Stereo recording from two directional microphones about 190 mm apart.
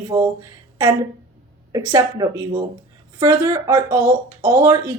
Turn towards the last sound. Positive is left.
turn(degrees=-15)  # may be behind; listen again after turning